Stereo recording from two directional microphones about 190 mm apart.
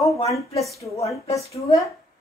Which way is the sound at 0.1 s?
15° left (ahead or behind).